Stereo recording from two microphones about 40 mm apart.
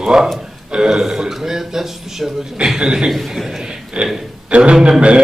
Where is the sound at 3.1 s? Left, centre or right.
Centre.